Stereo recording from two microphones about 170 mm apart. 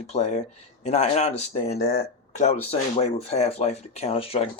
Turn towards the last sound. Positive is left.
turn(degrees=35)  # may be behind; listen again after turning